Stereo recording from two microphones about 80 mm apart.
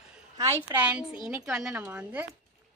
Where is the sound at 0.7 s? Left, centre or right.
Right.